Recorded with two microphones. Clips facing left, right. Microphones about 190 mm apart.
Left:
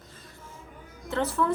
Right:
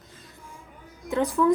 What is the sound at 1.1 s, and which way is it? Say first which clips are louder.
Speech: right 3 dB; 15° right (ahead or behind).